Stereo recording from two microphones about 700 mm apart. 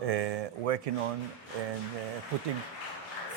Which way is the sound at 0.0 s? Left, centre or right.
Right.